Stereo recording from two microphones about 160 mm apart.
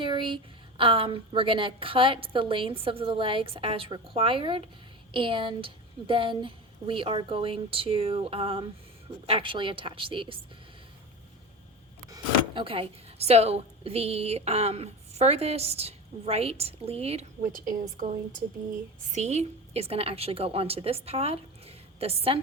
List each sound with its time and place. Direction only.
0.0 s a woman's voice: 30° right (ahead or behind)
12.1 s speech: 35° right (ahead or behind)
19.1 s a woman's voice: 45° right (ahead or behind)